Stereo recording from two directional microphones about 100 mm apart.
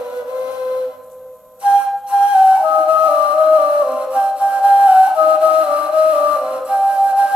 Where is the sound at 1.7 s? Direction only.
10° right (ahead or behind).